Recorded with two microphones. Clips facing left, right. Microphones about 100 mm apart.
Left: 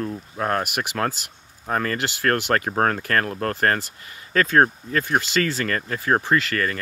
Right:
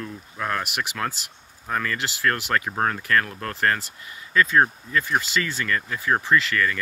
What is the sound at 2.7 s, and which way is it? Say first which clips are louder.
Speech: left 3 dB; 45° left (ahead or behind).